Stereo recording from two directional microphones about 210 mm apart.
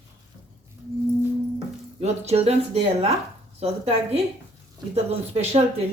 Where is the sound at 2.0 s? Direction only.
30° right (ahead or behind).